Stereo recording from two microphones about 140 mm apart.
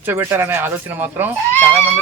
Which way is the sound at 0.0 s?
15° right (ahead or behind).